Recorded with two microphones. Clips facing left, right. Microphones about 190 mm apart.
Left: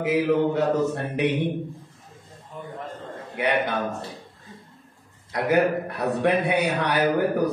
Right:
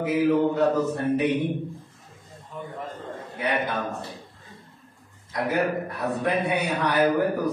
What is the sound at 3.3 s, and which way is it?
Speech, 70° left (ahead or behind).